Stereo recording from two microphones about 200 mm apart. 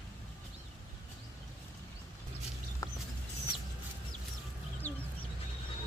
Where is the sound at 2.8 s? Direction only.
15° left (ahead or behind).